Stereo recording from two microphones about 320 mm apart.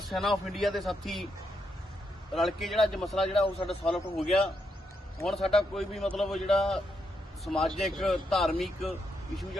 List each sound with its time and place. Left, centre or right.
0.0 s a man's voice: centre
2.3 s a man's voice: centre
3.4 s a man's voice: centre
3.8 s a man's voice: centre